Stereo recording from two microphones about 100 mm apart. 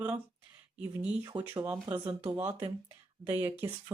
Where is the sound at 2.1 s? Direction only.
70° right (ahead or behind).